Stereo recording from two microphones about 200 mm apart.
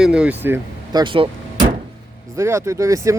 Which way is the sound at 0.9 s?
20° right (ahead or behind).